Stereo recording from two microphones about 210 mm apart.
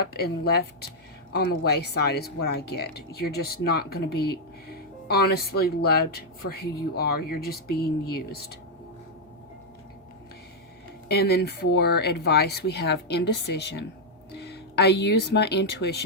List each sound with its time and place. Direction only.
0.0 s speech: 50° left (ahead or behind)
11.1 s speech: 50° left (ahead or behind)